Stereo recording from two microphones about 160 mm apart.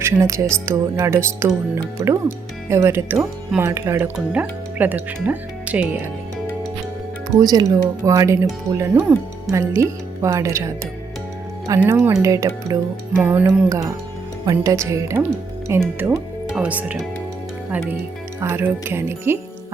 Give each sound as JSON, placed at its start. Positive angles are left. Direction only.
{"t": 0.0, "sound": "speech", "side_deg": -15}
{"t": 7.3, "sound": "speech", "side_deg": -25}
{"t": 11.7, "sound": "speech", "side_deg": -15}
{"t": 18.3, "sound": "speech", "side_deg": -15}